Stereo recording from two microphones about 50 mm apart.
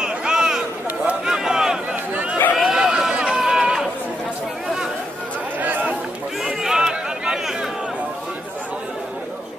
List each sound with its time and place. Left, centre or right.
0.0 s a sound: centre
2.5 s chatter: centre
2.8 s run: centre
5.6 s chatter: right
6.4 s chatter: centre